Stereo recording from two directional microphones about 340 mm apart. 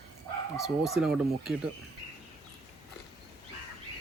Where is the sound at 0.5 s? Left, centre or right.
Centre.